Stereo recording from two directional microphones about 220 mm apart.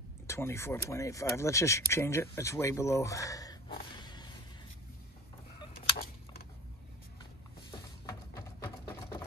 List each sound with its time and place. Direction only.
0.3 s speech: 10° left (ahead or behind)
3.9 s whip: 20° left (ahead or behind)
8.1 s a sound: 15° left (ahead or behind)